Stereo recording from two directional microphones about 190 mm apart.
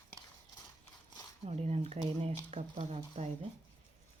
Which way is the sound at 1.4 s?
35° right (ahead or behind).